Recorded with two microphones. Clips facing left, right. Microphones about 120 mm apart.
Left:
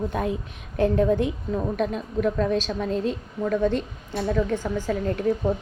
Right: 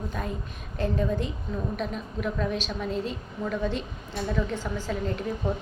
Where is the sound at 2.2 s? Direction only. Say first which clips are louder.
Left 7 dB; 45° left (ahead or behind).